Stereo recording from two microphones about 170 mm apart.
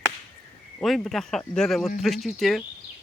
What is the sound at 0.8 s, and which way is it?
Speech, centre (ahead or behind).